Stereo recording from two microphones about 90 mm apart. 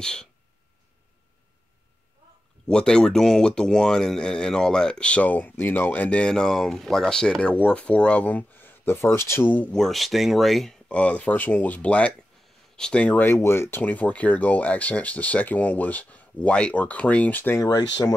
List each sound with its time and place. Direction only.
0.0 s speech: 10° left (ahead or behind)
2.7 s speech: 10° left (ahead or behind)
9.7 s speech: 5° left (ahead or behind)
10.9 s speech: 15° left (ahead or behind)
13.2 s speech: 25° left (ahead or behind)
17.6 s speech: 45° left (ahead or behind)